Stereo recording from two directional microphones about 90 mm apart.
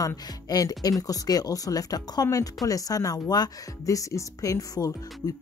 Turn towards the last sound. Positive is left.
turn(degrees=40)  # may be behind; listen again after turning